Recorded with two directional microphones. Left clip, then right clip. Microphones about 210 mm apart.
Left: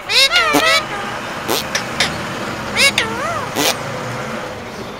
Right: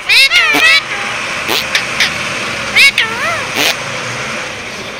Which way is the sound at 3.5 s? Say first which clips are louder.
Right 3 dB; 15° left (ahead or behind).